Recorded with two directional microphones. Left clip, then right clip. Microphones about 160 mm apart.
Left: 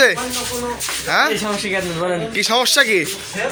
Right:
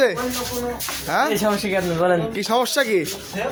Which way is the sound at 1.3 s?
75° right (ahead or behind).